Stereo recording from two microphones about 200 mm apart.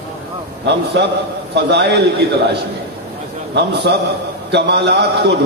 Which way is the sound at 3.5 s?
55° right (ahead or behind).